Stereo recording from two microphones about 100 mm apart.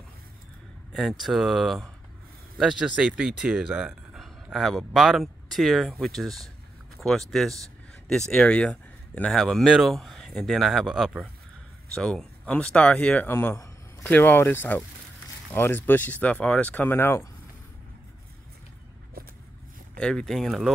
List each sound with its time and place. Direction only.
0.9 s speech: centre (ahead or behind); by 17.3 s 25° left (ahead or behind)
20.0 s speech: 5° left (ahead or behind)